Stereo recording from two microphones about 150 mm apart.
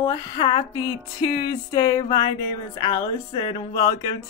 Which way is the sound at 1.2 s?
25° left (ahead or behind).